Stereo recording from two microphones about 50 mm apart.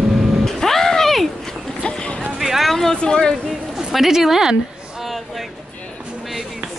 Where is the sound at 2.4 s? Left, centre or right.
Centre.